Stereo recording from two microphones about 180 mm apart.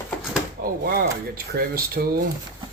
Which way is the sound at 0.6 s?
55° right (ahead or behind).